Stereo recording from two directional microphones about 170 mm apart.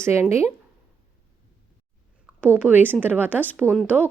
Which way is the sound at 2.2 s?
10° right (ahead or behind).